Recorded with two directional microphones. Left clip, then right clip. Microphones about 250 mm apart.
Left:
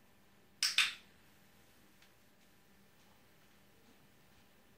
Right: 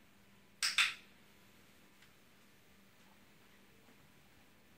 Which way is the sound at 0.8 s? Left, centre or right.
Centre.